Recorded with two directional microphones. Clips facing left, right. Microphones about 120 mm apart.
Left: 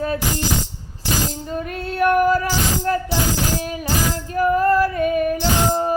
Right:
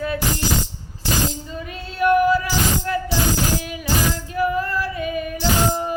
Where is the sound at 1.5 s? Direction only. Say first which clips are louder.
Left 5 dB; 50° left (ahead or behind).